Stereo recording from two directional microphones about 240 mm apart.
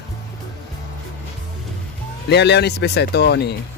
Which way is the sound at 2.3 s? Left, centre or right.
Left.